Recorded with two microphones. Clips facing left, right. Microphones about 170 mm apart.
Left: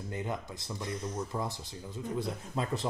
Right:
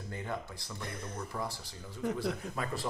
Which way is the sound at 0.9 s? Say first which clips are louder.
Left 7 dB; 60° right (ahead or behind).